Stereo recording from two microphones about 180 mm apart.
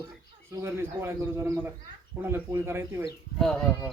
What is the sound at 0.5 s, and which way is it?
Speech, 15° right (ahead or behind).